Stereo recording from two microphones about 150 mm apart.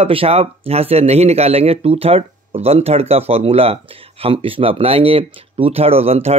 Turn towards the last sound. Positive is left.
turn(degrees=-45)  # may be behind; listen again after turning